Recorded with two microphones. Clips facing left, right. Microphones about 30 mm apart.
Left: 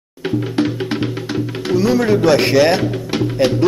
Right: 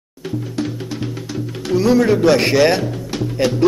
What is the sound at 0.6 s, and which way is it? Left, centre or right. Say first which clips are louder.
Music: left 6 dB; left.